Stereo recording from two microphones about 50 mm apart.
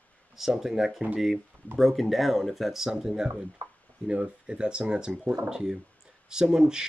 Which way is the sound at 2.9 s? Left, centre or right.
Centre.